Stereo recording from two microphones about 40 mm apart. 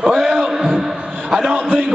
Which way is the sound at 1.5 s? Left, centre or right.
Right.